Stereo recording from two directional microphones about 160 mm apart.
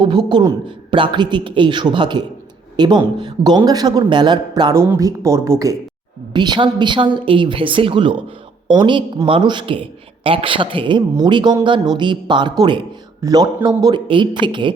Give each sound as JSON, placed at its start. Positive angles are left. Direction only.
{"t": 0.0, "sound": "a woman's voice", "side_deg": -25}